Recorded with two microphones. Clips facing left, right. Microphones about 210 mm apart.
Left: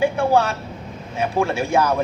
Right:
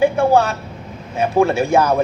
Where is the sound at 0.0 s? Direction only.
45° right (ahead or behind).